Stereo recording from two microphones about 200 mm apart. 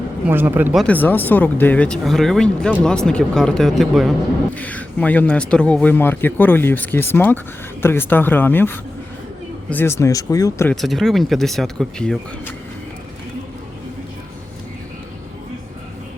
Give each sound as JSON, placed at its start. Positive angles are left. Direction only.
{"t": 0.3, "sound": "speech", "side_deg": -10}
{"t": 10.8, "sound": "speech", "side_deg": 0}